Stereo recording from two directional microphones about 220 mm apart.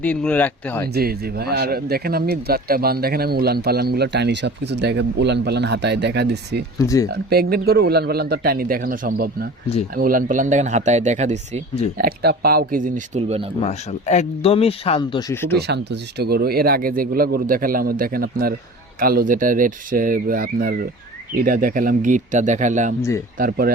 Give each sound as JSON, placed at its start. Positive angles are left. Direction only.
{"t": 0.0, "sound": "speech", "side_deg": 5}
{"t": 0.9, "sound": "speech", "side_deg": -45}
{"t": 6.7, "sound": "speech", "side_deg": 15}
{"t": 7.1, "sound": "speech", "side_deg": -45}
{"t": 11.9, "sound": "speech", "side_deg": -45}
{"t": 13.6, "sound": "speech", "side_deg": 30}
{"t": 15.5, "sound": "speech", "side_deg": -50}
{"t": 23.0, "sound": "speech", "side_deg": 15}
{"t": 23.4, "sound": "speech", "side_deg": -40}